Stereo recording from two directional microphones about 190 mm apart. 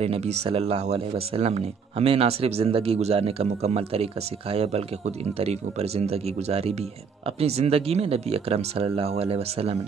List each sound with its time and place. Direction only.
0.0 s speech: 35° right (ahead or behind)